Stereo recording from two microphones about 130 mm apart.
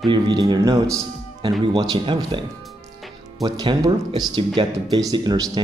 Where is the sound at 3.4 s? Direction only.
35° right (ahead or behind).